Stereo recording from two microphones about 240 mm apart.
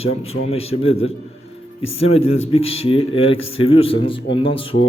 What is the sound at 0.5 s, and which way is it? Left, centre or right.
Speech, left.